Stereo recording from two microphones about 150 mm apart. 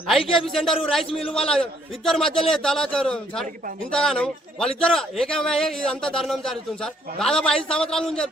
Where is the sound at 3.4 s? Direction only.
65° right (ahead or behind).